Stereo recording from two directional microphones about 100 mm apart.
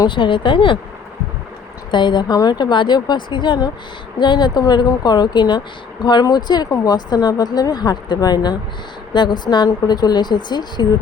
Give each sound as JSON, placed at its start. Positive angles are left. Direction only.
{"t": 0.0, "sound": "speech", "side_deg": 55}
{"t": 1.9, "sound": "speech", "side_deg": 50}